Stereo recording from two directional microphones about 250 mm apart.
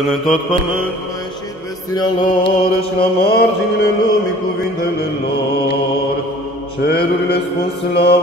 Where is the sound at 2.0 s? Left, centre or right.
Left.